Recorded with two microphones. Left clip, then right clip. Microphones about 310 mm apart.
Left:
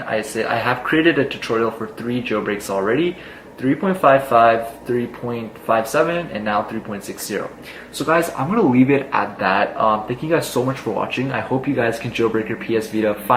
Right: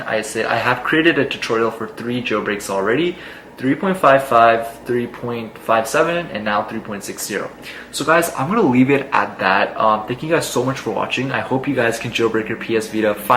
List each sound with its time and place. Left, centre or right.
0.1 s speech: centre
10.5 s speech: left
11.0 s speech: centre